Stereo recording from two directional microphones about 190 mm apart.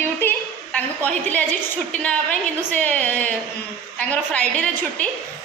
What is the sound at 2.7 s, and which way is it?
A woman's voice, 10° left (ahead or behind).